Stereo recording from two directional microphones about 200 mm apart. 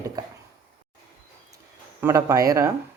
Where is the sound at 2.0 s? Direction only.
10° right (ahead or behind).